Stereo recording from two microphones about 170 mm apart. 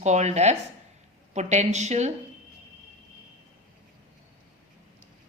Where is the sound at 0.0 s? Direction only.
40° right (ahead or behind).